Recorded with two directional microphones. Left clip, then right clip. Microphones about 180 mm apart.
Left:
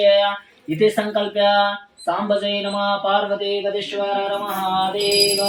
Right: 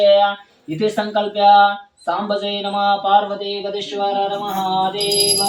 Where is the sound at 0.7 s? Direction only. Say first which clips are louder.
Left 3 dB; 10° right (ahead or behind).